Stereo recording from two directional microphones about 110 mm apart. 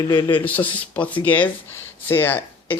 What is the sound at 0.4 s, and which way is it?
Speech, 15° left (ahead or behind).